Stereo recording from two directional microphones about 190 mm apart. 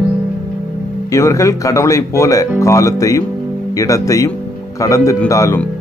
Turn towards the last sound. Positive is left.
turn(degrees=15)  # may be behind; listen again after turning